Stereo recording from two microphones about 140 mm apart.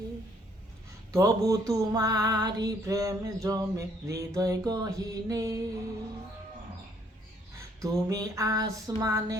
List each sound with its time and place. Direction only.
1.1 s female singing: 25° right (ahead or behind)
7.8 s female singing: 25° right (ahead or behind)